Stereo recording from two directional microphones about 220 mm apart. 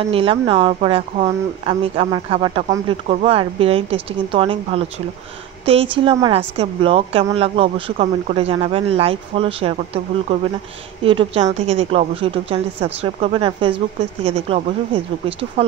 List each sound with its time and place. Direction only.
0.1 s a woman's voice: 25° right (ahead or behind)
11.1 s a woman's voice: 25° right (ahead or behind)